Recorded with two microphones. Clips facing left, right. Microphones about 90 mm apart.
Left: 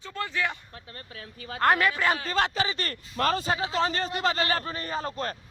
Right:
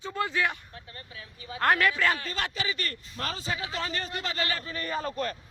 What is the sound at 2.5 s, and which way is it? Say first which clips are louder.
Speech: left 4 dB; 35° left (ahead or behind).